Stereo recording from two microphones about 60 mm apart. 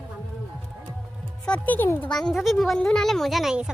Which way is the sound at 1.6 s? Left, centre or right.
Left.